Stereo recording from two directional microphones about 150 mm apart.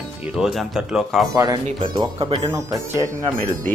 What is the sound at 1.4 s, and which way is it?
Speech, 30° right (ahead or behind).